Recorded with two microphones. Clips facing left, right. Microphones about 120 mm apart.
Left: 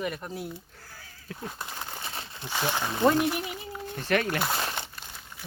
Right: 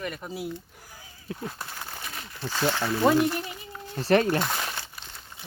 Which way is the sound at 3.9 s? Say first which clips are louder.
Right 6 dB; 35° right (ahead or behind).